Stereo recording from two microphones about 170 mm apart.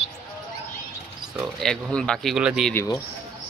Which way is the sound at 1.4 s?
5° left (ahead or behind).